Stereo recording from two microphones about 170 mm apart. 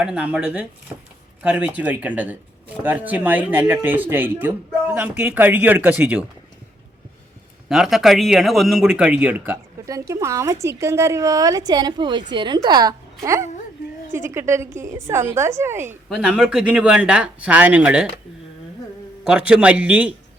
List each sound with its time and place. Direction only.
0.0 s speech: 5° right (ahead or behind)
7.7 s a man's voice: centre (ahead or behind)
19.2 s speech: 5° right (ahead or behind)